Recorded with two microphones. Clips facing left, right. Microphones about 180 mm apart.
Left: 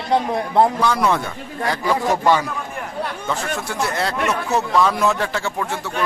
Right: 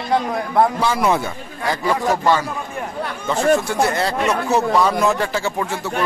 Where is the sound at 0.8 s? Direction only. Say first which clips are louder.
Right 1 dB; 10° right (ahead or behind).